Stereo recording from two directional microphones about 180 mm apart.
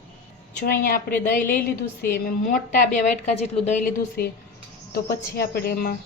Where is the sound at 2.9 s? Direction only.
40° left (ahead or behind).